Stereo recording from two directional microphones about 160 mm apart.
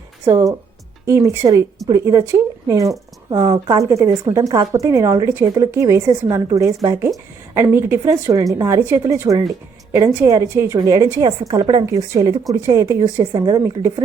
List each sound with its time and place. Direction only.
1.0 s a woman's voice: 15° right (ahead or behind)